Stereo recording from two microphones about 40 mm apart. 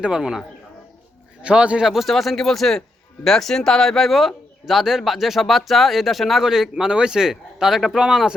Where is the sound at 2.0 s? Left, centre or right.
Centre.